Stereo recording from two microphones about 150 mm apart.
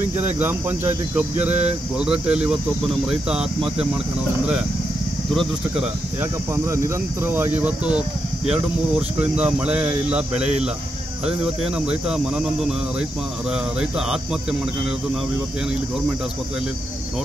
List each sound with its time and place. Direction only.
0.2 s speech: 15° right (ahead or behind)
5.3 s speech: centre (ahead or behind)
6.5 s speech: 20° right (ahead or behind)